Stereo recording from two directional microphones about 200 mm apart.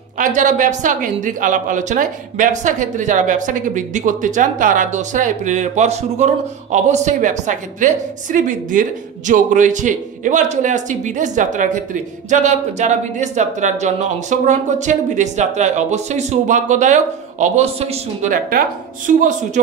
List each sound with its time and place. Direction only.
0.2 s a woman's voice: 40° right (ahead or behind)